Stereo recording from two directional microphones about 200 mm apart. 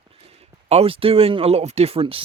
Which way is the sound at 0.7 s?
30° right (ahead or behind).